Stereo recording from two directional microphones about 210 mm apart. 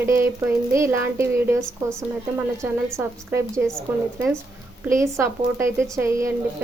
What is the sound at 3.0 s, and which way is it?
Speech, 10° right (ahead or behind).